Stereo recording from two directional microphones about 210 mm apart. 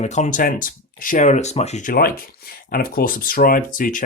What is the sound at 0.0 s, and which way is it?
Speech, 35° left (ahead or behind).